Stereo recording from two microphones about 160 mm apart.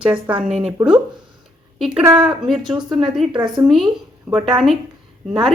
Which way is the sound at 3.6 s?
Centre (ahead or behind).